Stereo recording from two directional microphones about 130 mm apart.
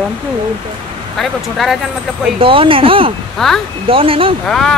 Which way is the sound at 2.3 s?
45° right (ahead or behind).